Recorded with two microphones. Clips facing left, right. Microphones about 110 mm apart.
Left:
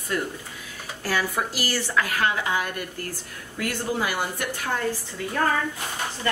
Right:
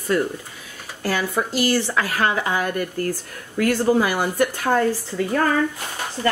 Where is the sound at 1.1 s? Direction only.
20° right (ahead or behind).